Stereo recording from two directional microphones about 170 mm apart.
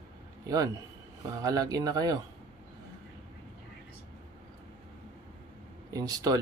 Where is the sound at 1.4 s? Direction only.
20° right (ahead or behind).